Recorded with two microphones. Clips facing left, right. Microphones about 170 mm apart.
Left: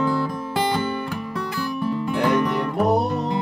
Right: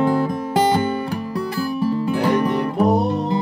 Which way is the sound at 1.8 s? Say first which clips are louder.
Right 2 dB; 35° right (ahead or behind).